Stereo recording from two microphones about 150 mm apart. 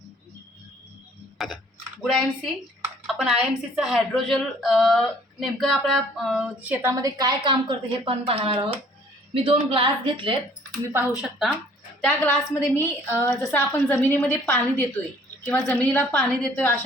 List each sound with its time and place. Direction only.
1.4 s a woman's voice: centre (ahead or behind)
7.0 s speech: 25° right (ahead or behind)
10.9 s a woman's voice: 5° right (ahead or behind)
12.0 s a woman's voice: 10° left (ahead or behind)
15.6 s a woman's voice: 10° left (ahead or behind)